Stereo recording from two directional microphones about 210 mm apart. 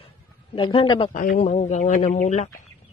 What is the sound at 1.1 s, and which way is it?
Speech, 40° left (ahead or behind).